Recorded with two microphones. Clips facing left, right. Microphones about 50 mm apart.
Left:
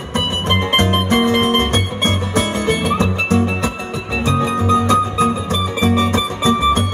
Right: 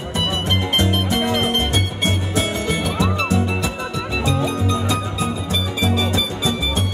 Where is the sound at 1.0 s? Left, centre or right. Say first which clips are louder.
Left 5 dB; left.